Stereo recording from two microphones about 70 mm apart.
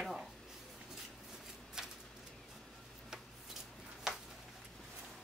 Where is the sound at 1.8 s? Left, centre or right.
Centre.